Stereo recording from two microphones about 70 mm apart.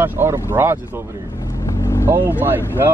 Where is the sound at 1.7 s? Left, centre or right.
Left.